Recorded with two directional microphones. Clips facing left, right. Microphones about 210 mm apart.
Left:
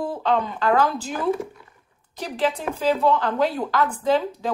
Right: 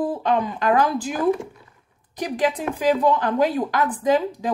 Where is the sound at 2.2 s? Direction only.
15° right (ahead or behind).